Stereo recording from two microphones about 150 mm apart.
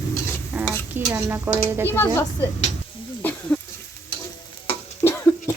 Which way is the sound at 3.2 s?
10° left (ahead or behind).